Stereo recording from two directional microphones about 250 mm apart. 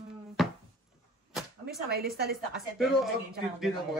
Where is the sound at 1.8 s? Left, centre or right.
Right.